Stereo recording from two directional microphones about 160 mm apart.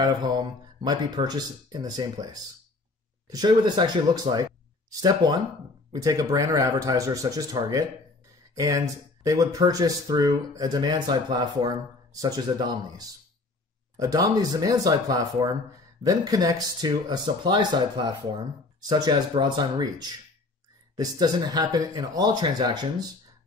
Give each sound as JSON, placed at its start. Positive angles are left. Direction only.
{"t": 0.0, "sound": "speech", "side_deg": -25}